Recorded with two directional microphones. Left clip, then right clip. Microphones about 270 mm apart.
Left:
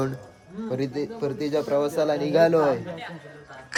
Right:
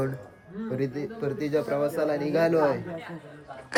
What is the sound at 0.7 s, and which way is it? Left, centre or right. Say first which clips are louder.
Speech: left 3 dB; centre.